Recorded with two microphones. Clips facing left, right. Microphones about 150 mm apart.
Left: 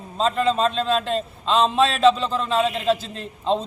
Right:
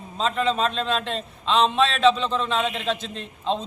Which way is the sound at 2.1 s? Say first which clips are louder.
Left 1 dB; centre (ahead or behind).